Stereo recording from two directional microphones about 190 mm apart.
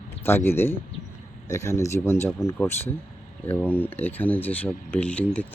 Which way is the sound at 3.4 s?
10° left (ahead or behind).